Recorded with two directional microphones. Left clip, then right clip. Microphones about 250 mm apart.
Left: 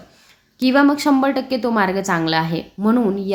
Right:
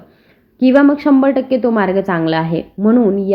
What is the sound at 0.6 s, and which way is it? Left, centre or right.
A woman's voice, centre.